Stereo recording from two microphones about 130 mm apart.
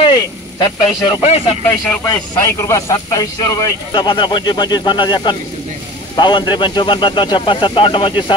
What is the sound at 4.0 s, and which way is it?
Speech, 40° left (ahead or behind).